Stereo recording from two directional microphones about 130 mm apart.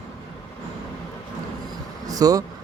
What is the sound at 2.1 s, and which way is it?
Vehicle, 30° right (ahead or behind).